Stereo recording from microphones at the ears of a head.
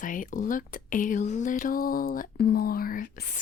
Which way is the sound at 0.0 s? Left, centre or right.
Left.